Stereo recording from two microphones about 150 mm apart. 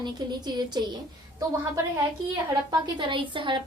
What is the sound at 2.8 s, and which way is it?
Speech, 35° right (ahead or behind).